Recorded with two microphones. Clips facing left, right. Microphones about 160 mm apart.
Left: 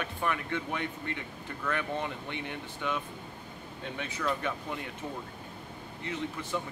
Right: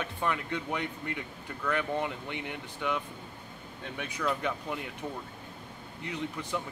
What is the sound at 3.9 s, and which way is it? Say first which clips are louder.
Speech: right 1 dB; 15° right (ahead or behind).